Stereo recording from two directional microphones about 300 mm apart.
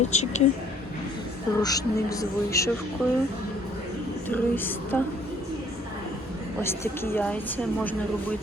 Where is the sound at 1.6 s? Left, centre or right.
Centre.